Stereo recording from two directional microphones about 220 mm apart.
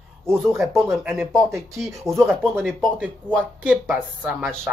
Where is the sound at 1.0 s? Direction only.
10° right (ahead or behind).